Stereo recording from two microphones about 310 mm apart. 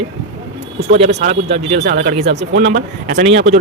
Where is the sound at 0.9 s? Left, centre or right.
Right.